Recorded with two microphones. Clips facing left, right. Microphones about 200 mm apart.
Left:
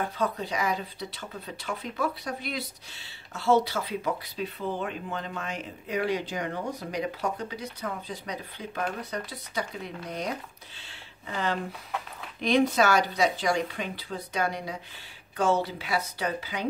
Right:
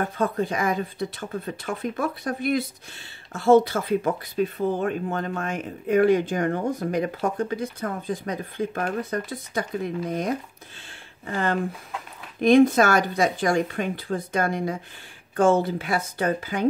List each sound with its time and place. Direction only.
0.2 s speech: 50° right (ahead or behind)
10.9 s a sound: 50° right (ahead or behind)
12.4 s speech: 50° right (ahead or behind)